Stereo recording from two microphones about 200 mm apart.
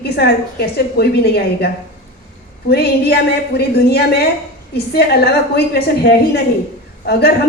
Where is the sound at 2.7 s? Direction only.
55° left (ahead or behind).